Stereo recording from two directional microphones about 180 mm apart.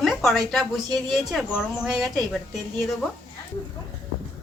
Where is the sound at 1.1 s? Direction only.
Centre (ahead or behind).